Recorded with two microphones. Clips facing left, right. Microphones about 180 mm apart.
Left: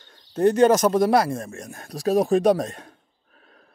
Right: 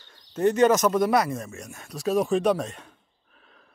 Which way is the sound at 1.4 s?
50° left (ahead or behind).